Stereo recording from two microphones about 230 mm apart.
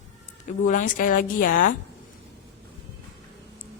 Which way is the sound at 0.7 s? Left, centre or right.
Left.